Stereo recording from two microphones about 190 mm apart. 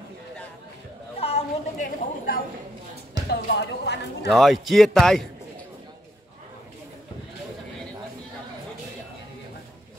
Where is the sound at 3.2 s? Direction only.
65° left (ahead or behind).